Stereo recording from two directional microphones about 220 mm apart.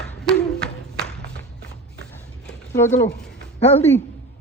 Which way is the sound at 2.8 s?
10° left (ahead or behind).